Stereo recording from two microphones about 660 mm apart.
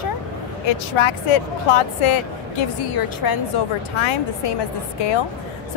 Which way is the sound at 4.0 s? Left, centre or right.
Left.